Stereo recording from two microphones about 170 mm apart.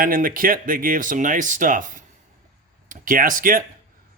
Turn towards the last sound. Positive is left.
turn(degrees=-55)  # may be behind; listen again after turning